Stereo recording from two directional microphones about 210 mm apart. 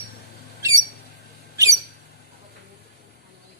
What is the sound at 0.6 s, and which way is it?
Squawk, 15° right (ahead or behind).